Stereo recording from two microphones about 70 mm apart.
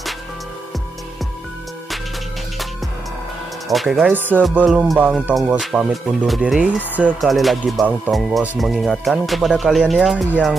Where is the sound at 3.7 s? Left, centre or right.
Centre.